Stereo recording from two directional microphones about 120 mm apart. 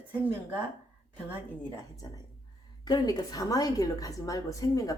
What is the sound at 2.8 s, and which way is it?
A woman's voice, 35° left (ahead or behind).